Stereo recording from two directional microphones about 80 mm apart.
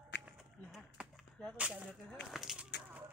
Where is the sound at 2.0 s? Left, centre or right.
Centre.